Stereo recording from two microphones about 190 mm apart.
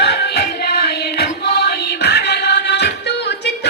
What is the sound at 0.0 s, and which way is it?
Music, 60° left (ahead or behind).